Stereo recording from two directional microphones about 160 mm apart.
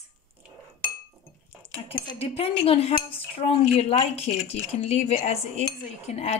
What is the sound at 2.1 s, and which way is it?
Speech, 40° left (ahead or behind).